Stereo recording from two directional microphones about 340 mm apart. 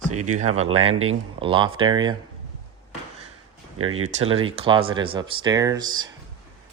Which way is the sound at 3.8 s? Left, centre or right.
Right.